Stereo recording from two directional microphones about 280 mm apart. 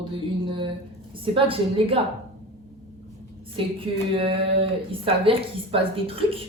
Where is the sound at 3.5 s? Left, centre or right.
Centre.